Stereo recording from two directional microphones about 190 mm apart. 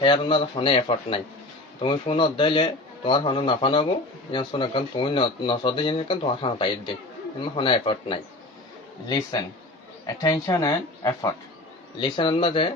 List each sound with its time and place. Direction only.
0.0 s speech: 25° left (ahead or behind)